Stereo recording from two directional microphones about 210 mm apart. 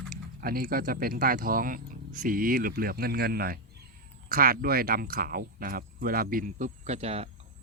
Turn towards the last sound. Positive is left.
turn(degrees=-30)  # may be behind; listen again after turning